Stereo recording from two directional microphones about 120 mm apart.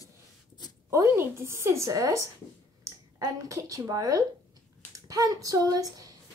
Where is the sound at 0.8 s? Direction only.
25° right (ahead or behind).